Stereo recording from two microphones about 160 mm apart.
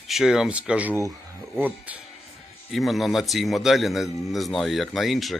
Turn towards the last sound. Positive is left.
turn(degrees=0)  # may be behind; listen again after turning